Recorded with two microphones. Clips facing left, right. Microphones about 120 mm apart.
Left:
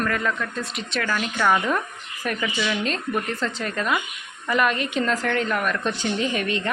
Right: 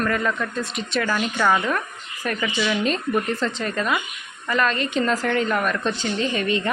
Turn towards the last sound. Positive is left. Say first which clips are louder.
# right 2 dB
turn(degrees=0)  # may be behind; listen again after turning